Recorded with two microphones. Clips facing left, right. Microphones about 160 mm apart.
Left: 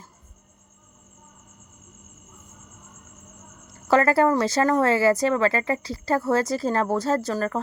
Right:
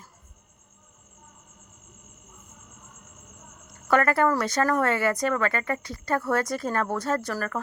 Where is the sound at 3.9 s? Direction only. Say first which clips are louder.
Left 3 dB; 30° left (ahead or behind).